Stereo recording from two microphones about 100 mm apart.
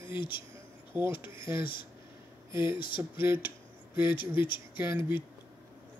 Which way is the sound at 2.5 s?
25° right (ahead or behind).